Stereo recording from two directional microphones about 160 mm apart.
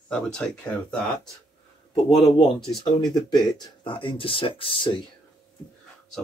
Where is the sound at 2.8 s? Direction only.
30° left (ahead or behind).